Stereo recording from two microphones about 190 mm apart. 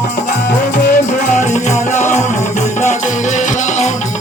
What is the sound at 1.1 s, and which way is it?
Music, 40° left (ahead or behind).